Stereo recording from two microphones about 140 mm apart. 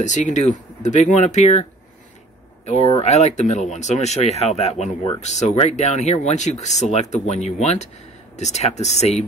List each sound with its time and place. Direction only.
0.0 s speech: 60° left (ahead or behind)